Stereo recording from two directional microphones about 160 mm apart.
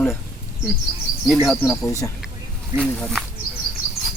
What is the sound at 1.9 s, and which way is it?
Speech, 20° left (ahead or behind).